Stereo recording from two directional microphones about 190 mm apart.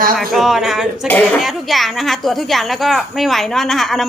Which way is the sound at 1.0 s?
10° left (ahead or behind).